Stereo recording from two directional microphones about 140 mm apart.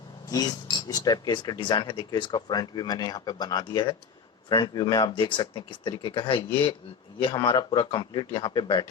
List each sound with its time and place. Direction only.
0.9 s speech: 30° left (ahead or behind)